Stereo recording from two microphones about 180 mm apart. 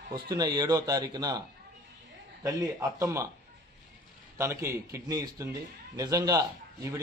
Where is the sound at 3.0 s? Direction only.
15° right (ahead or behind).